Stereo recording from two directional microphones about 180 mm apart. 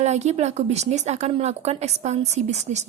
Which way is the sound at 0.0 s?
40° right (ahead or behind).